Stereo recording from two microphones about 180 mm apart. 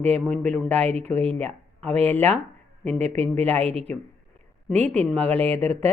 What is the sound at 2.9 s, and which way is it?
Speech, 40° right (ahead or behind).